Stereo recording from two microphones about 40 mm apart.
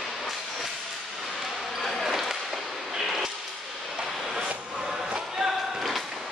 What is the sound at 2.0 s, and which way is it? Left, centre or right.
Basketball bounce, centre.